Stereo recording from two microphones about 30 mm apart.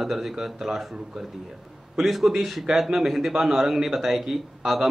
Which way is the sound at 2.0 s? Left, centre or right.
Centre.